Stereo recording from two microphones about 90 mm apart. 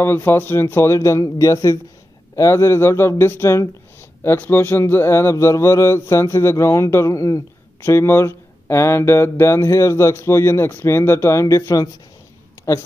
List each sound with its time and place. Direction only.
0.0 s speech: 25° left (ahead or behind)
2.3 s mantra: 35° left (ahead or behind)